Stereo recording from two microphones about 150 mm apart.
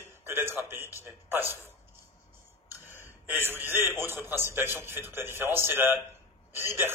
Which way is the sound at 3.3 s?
15° right (ahead or behind).